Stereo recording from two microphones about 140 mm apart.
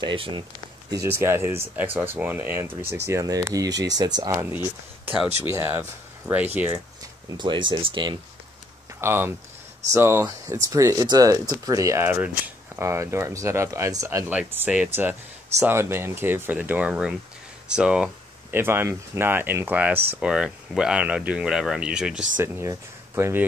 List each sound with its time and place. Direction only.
0.0 s speech: 35° right (ahead or behind)
5.4 s speech: 15° right (ahead or behind)
7.3 s speech: 35° right (ahead or behind)
9.0 s speech: 15° right (ahead or behind)
22.4 s speech: 20° right (ahead or behind)